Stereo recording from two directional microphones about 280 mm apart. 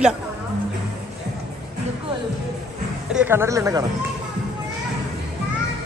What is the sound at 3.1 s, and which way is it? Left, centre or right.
Speech, centre.